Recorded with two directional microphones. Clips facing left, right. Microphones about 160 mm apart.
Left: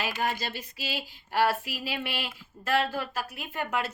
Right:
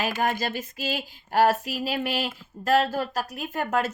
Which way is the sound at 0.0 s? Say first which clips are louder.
Right 5 dB; 50° right (ahead or behind).